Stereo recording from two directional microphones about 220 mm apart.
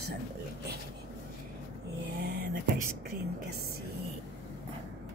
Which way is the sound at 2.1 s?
45° right (ahead or behind).